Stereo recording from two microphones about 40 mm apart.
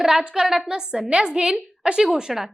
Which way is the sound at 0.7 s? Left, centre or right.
Right.